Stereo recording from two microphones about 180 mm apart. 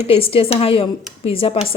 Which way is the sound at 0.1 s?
30° left (ahead or behind).